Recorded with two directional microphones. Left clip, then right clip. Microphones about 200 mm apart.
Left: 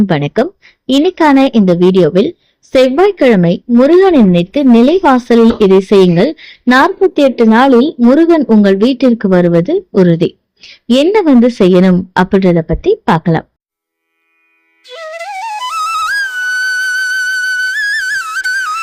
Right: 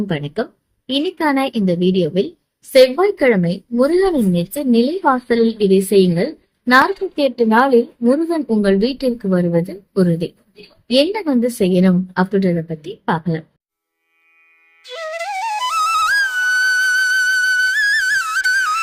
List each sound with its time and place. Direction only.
0.1 s speech: 40° left (ahead or behind)
8.8 s speech: 40° left (ahead or behind)
14.8 s flute: centre (ahead or behind)